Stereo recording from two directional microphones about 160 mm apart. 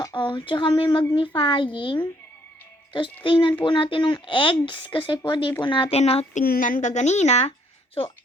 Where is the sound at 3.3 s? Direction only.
30° left (ahead or behind).